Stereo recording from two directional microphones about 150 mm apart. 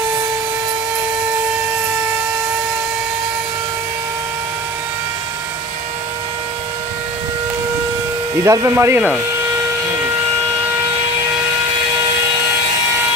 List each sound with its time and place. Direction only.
8.5 s speech: 20° right (ahead or behind)